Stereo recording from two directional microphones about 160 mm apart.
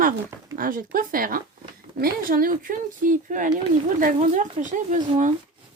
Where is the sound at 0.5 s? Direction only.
60° right (ahead or behind).